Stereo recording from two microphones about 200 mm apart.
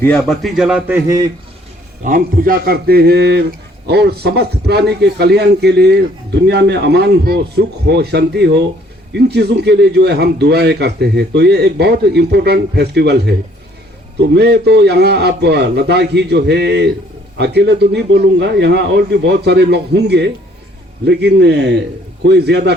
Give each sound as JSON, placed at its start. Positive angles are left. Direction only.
{"t": 0.0, "sound": "a man's voice", "side_deg": 10}
{"t": 0.4, "sound": "a man's voice", "side_deg": -5}
{"t": 2.0, "sound": "a man's voice", "side_deg": -45}